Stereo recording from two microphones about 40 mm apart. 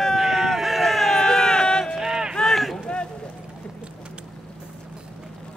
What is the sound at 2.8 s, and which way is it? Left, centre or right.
Boat, left.